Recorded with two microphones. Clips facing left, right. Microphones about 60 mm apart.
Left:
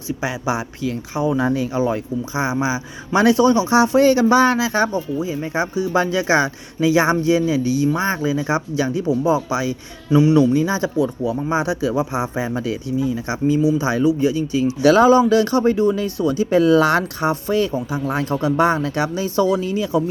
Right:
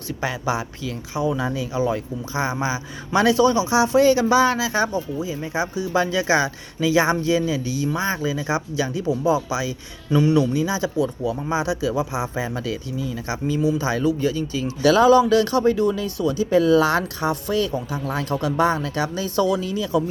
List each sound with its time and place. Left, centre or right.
0.2 s a man's voice: left
10.1 s speech: centre
10.3 s speech: left
13.6 s a man's voice: centre; by 20.1 s left